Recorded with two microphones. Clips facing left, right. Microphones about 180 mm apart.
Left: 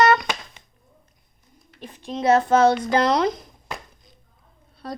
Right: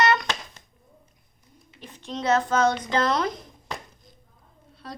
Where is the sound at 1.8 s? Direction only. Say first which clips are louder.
Left 3 dB; 10° left (ahead or behind).